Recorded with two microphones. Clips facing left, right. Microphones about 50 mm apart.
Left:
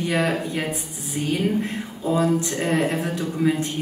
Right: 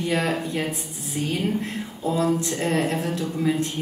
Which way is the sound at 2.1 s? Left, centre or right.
Left.